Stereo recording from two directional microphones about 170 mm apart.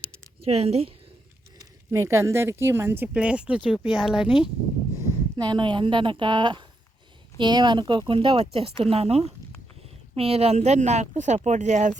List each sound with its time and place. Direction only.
0.4 s speech: 35° right (ahead or behind)
1.9 s speech: 15° right (ahead or behind)
5.4 s a woman's voice: 25° right (ahead or behind); by 11.9 s 45° right (ahead or behind)